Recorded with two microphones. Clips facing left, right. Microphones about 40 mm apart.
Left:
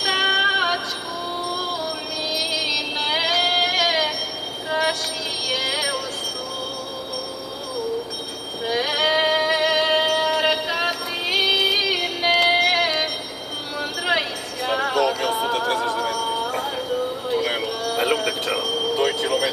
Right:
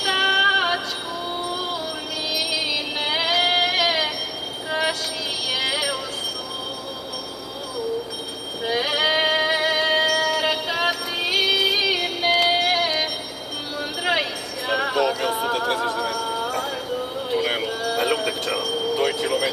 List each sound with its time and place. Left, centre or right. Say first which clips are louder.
0.0 s female singing: right 1 dB; centre
2.3 s music: left 1 dB; centre
4.6 s train: left 2 dB; centre
5.5 s music: even; centre
8.6 s music: even; centre
9.7 s music: left 1 dB; centre
10.0 s music: even; left
10.3 s music: left 2 dB; centre
10.7 s music: even; centre
14.8 s music: left 1 dB; centre
19.0 s vehicle: left 1 dB; centre